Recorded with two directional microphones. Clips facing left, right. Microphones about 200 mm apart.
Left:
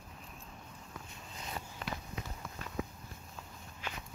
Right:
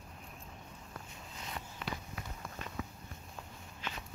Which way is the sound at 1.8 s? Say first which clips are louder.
Even; 35° left (ahead or behind).